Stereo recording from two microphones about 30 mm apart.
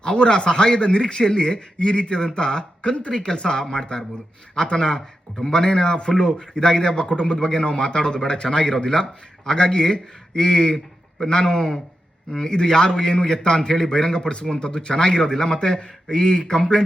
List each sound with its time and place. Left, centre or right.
0.0 s a man's voice: left
8.4 s a man's voice: left